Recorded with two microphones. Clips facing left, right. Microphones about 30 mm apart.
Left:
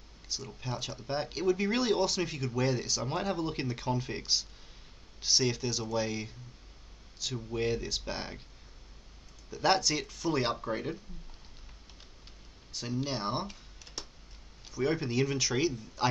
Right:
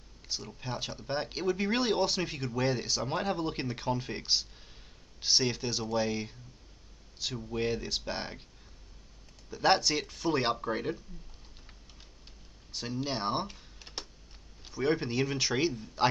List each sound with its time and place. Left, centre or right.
0.3 s speech: centre
7.3 s speech: centre
9.5 s speech: centre
12.7 s speech: centre
13.7 s tick: right
14.6 s speech: centre